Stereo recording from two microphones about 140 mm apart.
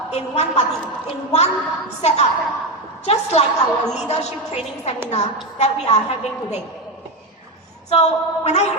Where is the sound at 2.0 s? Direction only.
50° left (ahead or behind).